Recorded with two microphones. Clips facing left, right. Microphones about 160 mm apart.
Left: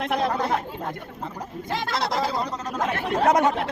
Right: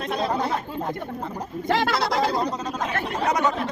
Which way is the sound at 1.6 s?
75° right (ahead or behind).